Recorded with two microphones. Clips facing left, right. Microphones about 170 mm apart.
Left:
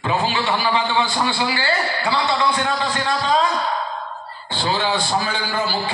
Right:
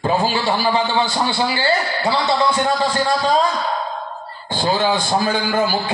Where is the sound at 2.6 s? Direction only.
40° right (ahead or behind).